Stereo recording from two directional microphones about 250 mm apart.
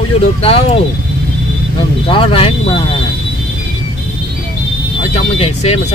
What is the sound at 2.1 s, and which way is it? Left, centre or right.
Speech, left.